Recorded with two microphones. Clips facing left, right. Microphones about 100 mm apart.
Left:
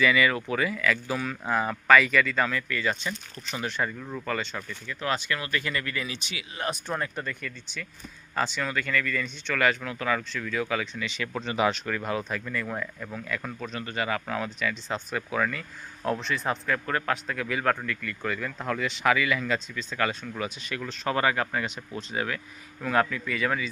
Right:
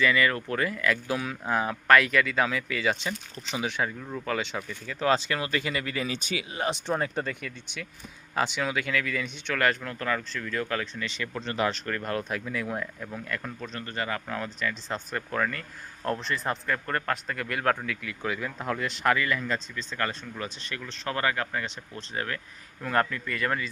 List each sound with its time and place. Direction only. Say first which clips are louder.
0.0 s a man's voice: left 1 dB; 10° left (ahead or behind); by 3.6 s 20° right (ahead or behind)
3.6 s a man's voice: even; 10° right (ahead or behind)
4.4 s speech: right 1 dB; 15° right (ahead or behind)
4.9 s speech: right 4 dB; 30° right (ahead or behind)
6.1 s speech: right 6 dB; 40° right (ahead or behind)
6.5 s speech: right 1 dB; 25° right (ahead or behind); by 9.3 s 10° right (ahead or behind)
9.6 s speech: left 1 dB; 5° left (ahead or behind)
12.3 s a man's voice: even; 5° right (ahead or behind)
13.7 s a man's voice: left 3 dB; 15° left (ahead or behind)
21.0 s a man's voice: left 3 dB; 20° left (ahead or behind); by 23.6 s 5° left (ahead or behind)